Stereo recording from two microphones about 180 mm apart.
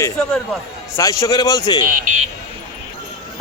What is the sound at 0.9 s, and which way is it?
Speech, 20° left (ahead or behind).